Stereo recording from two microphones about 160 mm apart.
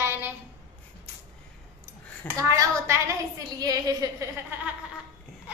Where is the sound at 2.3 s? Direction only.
20° right (ahead or behind).